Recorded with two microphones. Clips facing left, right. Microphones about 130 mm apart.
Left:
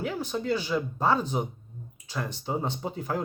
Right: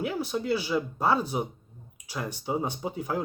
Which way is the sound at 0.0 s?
10° right (ahead or behind).